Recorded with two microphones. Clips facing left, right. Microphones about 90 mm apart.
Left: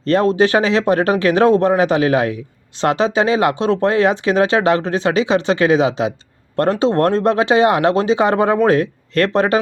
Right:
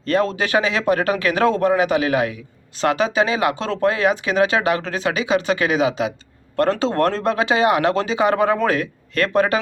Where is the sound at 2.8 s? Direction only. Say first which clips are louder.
Left 3 dB; 30° left (ahead or behind).